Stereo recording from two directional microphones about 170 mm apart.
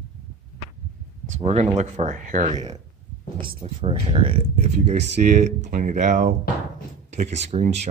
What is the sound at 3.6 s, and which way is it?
Speech, 30° right (ahead or behind).